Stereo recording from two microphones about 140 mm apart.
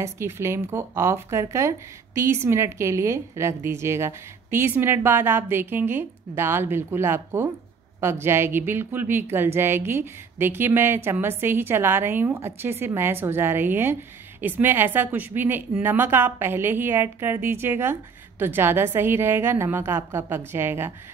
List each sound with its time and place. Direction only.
0.0 s speech: 20° right (ahead or behind)